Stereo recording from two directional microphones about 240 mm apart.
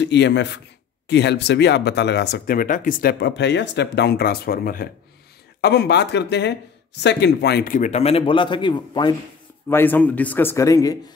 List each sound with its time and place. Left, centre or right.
0.0 s speech: left; by 9.1 s centre
9.7 s a man's voice: centre